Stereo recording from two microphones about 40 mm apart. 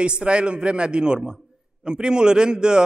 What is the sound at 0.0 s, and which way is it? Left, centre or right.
A man's voice, right.